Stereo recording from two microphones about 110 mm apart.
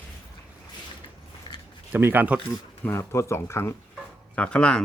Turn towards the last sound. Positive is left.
turn(degrees=10)  # may be behind; listen again after turning